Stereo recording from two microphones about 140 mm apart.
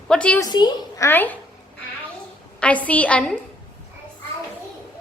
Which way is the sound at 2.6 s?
10° left (ahead or behind).